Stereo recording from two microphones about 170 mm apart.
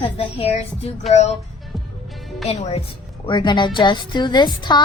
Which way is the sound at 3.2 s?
25° left (ahead or behind).